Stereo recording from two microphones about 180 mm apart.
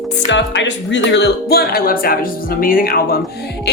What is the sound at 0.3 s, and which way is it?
Speech, 90° left.